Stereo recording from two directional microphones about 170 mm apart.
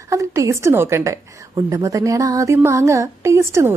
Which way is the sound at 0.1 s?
20° right (ahead or behind).